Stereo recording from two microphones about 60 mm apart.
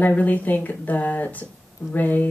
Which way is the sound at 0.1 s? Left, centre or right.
Left.